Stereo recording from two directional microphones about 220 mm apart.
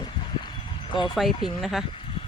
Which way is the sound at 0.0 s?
20° left (ahead or behind).